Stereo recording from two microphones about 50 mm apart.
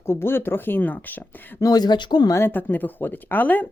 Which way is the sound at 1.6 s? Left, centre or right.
Left.